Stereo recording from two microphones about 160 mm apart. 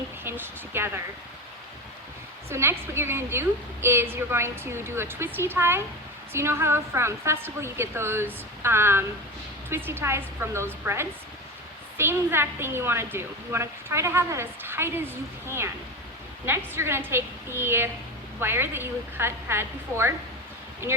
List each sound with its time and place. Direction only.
0.3 s a woman's voice: 15° right (ahead or behind)
2.5 s a woman's voice: 15° right (ahead or behind)